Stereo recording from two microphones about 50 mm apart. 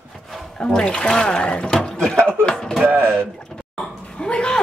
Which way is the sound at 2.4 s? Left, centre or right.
Centre.